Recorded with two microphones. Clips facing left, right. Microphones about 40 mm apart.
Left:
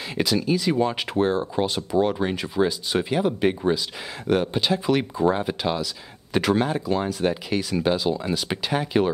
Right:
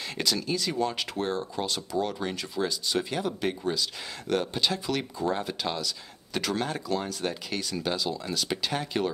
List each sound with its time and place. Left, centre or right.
0.2 s speech: centre